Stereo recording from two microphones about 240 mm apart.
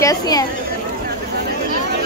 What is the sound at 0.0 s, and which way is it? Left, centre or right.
Speech, centre.